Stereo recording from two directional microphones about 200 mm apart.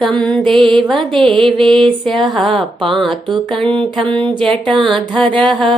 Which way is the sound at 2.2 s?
Centre (ahead or behind).